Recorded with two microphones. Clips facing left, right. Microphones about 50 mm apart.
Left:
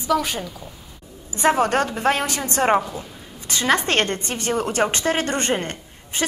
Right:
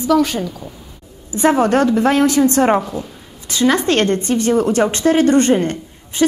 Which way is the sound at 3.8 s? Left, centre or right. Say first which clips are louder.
Right 6 dB; left.